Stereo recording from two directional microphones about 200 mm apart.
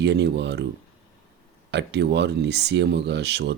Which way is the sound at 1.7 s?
60° right (ahead or behind).